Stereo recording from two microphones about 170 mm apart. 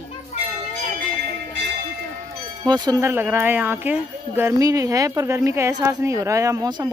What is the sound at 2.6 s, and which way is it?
Speech, 25° right (ahead or behind).